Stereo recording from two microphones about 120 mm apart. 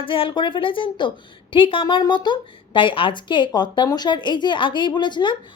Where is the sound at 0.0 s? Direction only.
45° left (ahead or behind).